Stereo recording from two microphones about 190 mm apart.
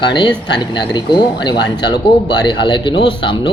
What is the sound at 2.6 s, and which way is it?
Speech, 25° left (ahead or behind).